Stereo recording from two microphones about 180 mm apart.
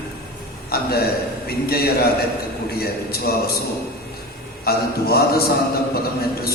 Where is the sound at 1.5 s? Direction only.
60° left (ahead or behind).